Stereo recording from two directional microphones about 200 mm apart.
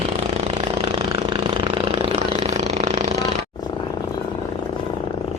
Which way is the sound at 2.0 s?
35° right (ahead or behind).